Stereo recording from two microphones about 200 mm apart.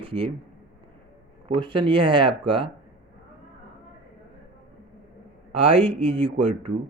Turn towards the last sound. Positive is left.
turn(degrees=-25)  # may be behind; listen again after turning